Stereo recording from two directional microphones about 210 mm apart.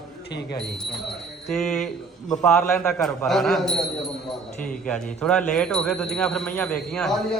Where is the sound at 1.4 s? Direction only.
Centre (ahead or behind).